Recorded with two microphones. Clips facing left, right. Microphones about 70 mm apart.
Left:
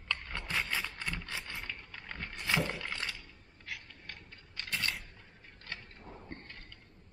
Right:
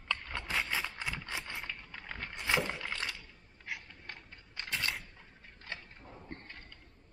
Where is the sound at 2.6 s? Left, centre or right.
Centre.